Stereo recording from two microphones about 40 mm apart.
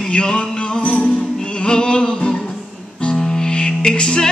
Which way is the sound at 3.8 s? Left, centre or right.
Left.